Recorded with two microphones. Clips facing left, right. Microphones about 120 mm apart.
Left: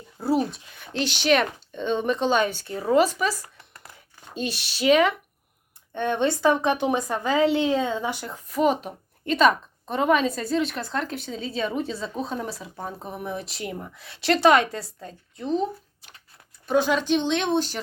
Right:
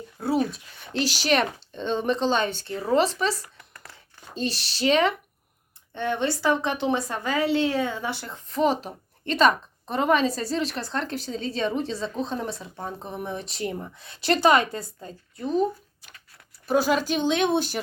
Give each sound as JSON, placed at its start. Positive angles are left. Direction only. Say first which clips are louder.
{"t": 0.5, "sound": "a woman's voice", "louder": "right 1 dB", "side_deg": 0}
{"t": 3.4, "sound": "a sound", "louder": "even", "side_deg": 30}
{"t": 4.8, "sound": "speech", "louder": "left 3 dB", "side_deg": -30}
{"t": 5.9, "sound": "a woman's voice", "louder": "left 2 dB", "side_deg": 20}
{"t": 16.6, "sound": "a woman's voice", "louder": "left 1 dB", "side_deg": -5}